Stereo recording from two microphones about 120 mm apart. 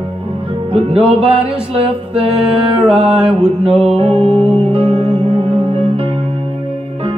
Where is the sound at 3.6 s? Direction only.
10° right (ahead or behind).